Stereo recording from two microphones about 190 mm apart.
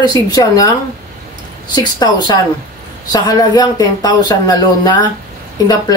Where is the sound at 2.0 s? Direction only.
20° left (ahead or behind).